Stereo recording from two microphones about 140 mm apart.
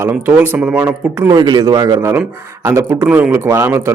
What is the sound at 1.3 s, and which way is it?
A man's voice, 30° right (ahead or behind).